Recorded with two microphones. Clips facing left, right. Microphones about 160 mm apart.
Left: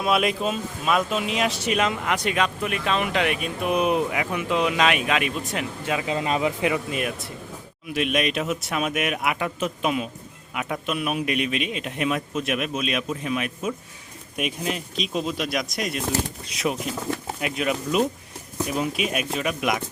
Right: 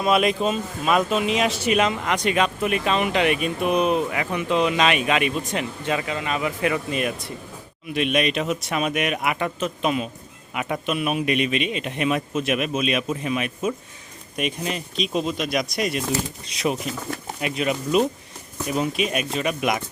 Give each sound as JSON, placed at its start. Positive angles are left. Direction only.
{"t": 0.0, "sound": "speech", "side_deg": 5}
{"t": 3.8, "sound": "speech", "side_deg": 10}
{"t": 6.1, "sound": "speech", "side_deg": 30}
{"t": 7.9, "sound": "speech", "side_deg": 0}